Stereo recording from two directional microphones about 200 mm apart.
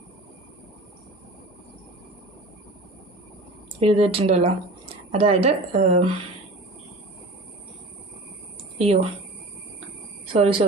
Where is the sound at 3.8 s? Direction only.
30° right (ahead or behind).